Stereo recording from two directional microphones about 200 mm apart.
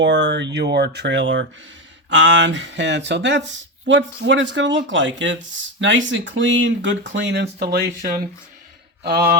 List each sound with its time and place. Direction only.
0.0 s speech: 60° right (ahead or behind)